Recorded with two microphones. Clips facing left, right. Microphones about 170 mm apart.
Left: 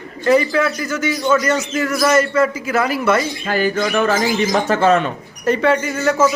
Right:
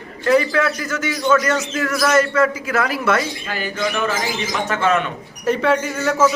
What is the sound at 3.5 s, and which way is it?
Speech, 50° left (ahead or behind).